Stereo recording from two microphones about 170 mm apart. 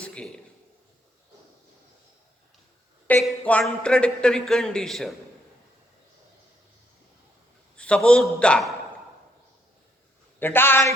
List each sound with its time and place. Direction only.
0.0 s a sound: 5° left (ahead or behind)
3.1 s a man's voice: 10° left (ahead or behind)
7.8 s a man's voice: 5° left (ahead or behind)
10.4 s a man's voice: 15° left (ahead or behind)